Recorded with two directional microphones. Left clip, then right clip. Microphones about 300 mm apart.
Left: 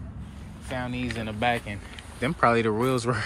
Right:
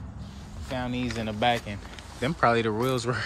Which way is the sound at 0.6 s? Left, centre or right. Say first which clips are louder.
Even; centre.